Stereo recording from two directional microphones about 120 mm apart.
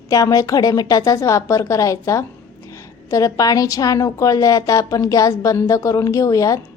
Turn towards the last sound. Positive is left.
turn(degrees=30)  # may be behind; listen again after turning